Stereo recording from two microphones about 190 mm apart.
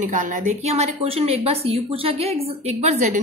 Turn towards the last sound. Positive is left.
turn(degrees=-40)  # may be behind; listen again after turning